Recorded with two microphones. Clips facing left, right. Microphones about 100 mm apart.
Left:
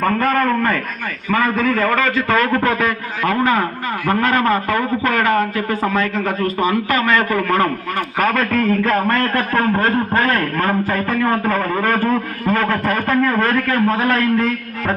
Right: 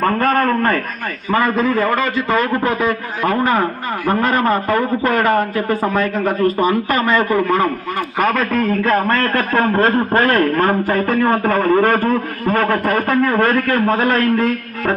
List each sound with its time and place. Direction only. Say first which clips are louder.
0.3 s a sound: right 1 dB; 20° right (ahead or behind)
1.3 s a man's voice: right 1 dB; 20° right (ahead or behind)
4.1 s a man's voice: even; 10° right (ahead or behind)
4.7 s speech: right 2 dB; 45° right (ahead or behind)
7.2 s a man's voice: right 2 dB; 20° right (ahead or behind)